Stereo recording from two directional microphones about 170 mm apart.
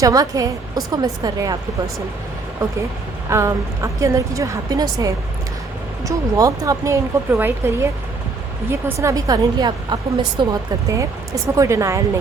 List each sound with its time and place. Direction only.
0.0 s a woman's voice: 20° right (ahead or behind)
3.2 s a woman's voice: 15° right (ahead or behind)
8.7 s a woman's voice: 15° right (ahead or behind)